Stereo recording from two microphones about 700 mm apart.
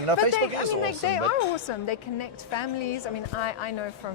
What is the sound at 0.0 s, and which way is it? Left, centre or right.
Speech, right.